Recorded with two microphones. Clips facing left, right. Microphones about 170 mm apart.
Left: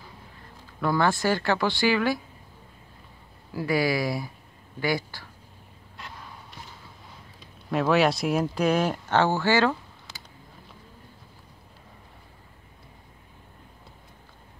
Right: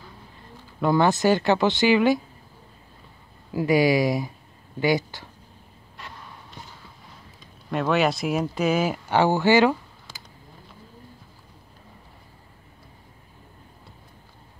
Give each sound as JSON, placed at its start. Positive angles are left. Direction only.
{"t": 0.7, "sound": "speech", "side_deg": -20}
{"t": 3.5, "sound": "speech", "side_deg": -20}
{"t": 7.7, "sound": "speech", "side_deg": 0}